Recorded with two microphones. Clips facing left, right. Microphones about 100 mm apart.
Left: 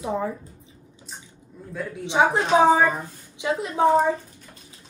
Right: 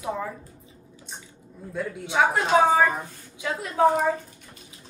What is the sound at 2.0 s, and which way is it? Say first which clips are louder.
Speech: left 2 dB; 25° left (ahead or behind).